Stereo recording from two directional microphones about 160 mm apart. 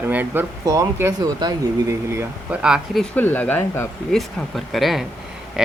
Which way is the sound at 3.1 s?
10° left (ahead or behind).